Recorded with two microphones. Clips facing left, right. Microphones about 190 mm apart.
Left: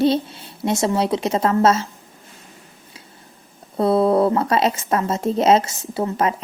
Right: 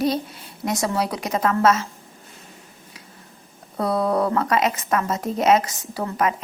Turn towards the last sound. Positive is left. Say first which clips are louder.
# left 3 dB
turn(degrees=25)  # may be behind; listen again after turning